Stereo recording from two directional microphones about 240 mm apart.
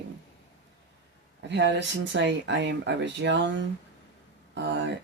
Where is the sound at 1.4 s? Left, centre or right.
Right.